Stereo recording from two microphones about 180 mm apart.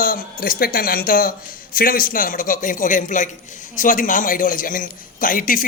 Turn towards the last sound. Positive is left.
turn(degrees=50)  # may be behind; listen again after turning